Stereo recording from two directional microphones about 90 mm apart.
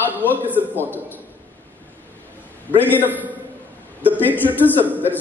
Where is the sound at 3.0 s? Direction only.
20° right (ahead or behind).